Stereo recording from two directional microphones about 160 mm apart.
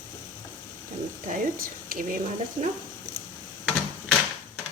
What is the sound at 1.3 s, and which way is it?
Speech, 60° right (ahead or behind).